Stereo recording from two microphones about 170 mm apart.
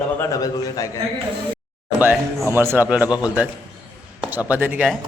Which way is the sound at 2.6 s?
10° right (ahead or behind).